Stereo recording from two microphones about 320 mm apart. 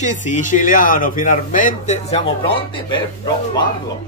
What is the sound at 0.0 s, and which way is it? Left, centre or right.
Speech, left.